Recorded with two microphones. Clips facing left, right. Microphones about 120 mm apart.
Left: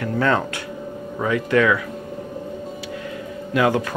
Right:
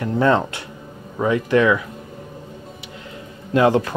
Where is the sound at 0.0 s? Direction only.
25° right (ahead or behind).